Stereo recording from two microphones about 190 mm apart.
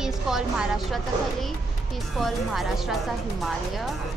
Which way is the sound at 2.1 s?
Centre (ahead or behind).